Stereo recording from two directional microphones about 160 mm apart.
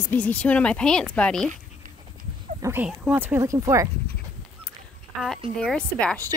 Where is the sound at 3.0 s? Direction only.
10° right (ahead or behind).